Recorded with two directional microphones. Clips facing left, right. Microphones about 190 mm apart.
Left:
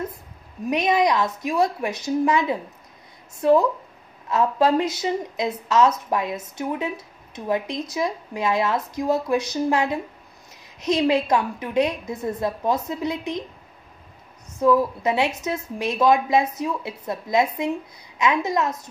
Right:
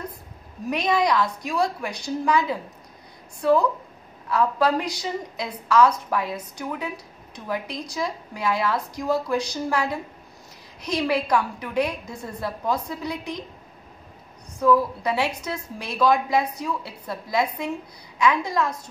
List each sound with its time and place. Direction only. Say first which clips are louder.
0.7 s a woman's voice: left 2 dB; 20° left (ahead or behind)
14.6 s a woman's voice: left 1 dB; 20° left (ahead or behind)